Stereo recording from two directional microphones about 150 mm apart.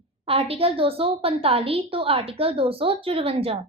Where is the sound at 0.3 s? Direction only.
40° right (ahead or behind).